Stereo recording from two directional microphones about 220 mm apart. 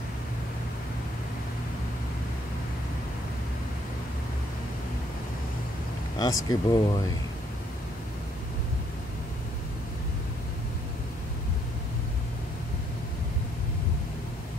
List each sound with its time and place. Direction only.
6.1 s speech: 20° left (ahead or behind)